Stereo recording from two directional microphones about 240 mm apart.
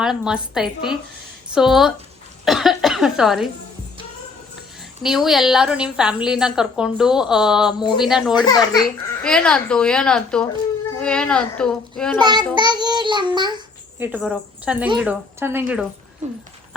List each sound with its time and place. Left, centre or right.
0.0 s a woman's voice: centre
5.0 s a woman's voice: centre
8.4 s a child's voice: centre
9.2 s a woman's voice: centre
12.2 s a child's voice: centre
12.5 s child singing: centre
14.2 s a woman's voice: centre